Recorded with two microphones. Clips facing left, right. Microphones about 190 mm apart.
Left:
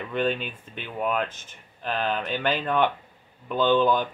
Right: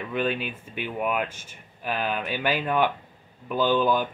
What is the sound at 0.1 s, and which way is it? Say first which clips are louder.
Speech: left 1 dB; 5° right (ahead or behind).